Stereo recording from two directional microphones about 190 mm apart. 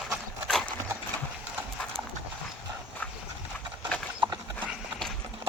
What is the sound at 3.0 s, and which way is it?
Clip-clop, 10° left (ahead or behind).